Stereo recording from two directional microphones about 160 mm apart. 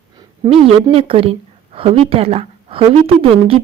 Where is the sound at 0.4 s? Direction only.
35° right (ahead or behind).